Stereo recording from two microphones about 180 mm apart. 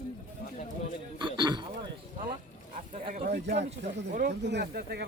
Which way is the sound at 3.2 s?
65° right (ahead or behind).